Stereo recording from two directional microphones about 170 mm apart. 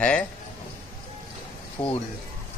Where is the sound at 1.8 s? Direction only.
15° left (ahead or behind).